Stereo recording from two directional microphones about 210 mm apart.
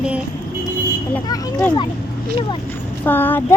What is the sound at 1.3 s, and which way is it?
Speech, 10° left (ahead or behind).